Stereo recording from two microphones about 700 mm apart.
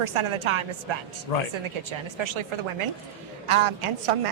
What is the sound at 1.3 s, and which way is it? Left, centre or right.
Speech, left.